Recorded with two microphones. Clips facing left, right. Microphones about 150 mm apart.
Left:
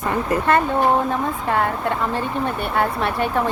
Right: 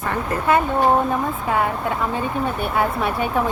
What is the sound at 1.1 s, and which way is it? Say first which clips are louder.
Speech: even; 5° right (ahead or behind).